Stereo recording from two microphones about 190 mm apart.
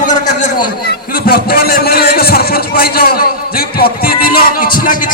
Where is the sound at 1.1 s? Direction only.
50° left (ahead or behind).